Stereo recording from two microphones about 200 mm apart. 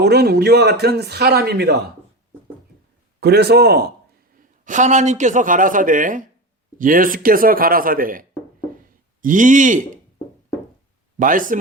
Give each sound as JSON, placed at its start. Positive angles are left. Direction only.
{"t": 0.0, "sound": "a man's voice", "side_deg": -55}
{"t": 3.2, "sound": "a man's voice", "side_deg": -55}
{"t": 4.6, "sound": "a man's voice", "side_deg": -40}
{"t": 9.2, "sound": "speech", "side_deg": -40}
{"t": 11.2, "sound": "speech", "side_deg": -40}